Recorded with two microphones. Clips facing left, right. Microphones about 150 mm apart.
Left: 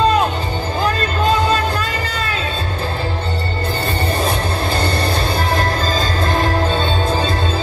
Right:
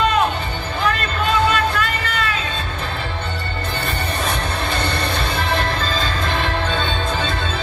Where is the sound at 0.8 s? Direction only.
35° left (ahead or behind).